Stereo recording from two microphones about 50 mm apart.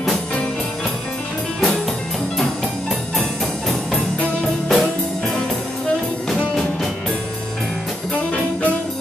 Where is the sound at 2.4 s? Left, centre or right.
Centre.